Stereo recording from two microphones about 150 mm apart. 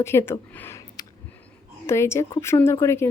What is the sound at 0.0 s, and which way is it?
Speech, 15° left (ahead or behind).